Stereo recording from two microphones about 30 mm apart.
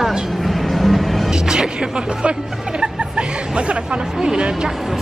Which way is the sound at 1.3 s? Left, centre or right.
Right.